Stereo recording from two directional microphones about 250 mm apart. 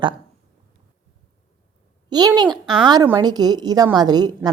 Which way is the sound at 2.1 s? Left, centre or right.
Centre.